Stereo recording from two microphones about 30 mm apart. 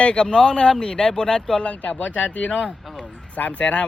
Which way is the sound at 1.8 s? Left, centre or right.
Left.